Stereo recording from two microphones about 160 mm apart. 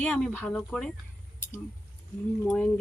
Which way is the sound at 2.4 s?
5° left (ahead or behind).